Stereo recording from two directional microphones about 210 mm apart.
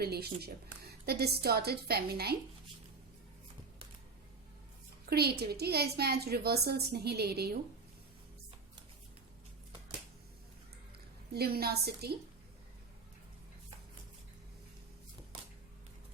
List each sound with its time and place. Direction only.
0.0 s a woman's voice: 50° right (ahead or behind)
5.0 s a woman's voice: 50° right (ahead or behind)
11.3 s a woman's voice: 45° right (ahead or behind)